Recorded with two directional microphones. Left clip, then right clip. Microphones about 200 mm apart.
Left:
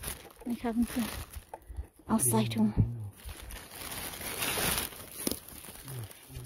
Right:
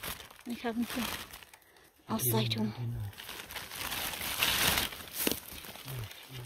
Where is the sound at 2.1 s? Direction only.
30° left (ahead or behind).